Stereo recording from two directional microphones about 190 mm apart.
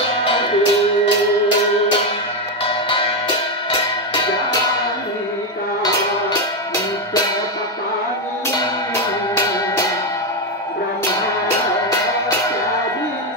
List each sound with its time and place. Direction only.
0.2 s music: 30° left (ahead or behind)
2.6 s music: 30° left (ahead or behind)